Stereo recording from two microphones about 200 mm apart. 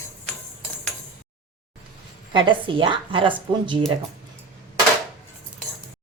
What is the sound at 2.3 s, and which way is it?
A woman's voice, 25° right (ahead or behind).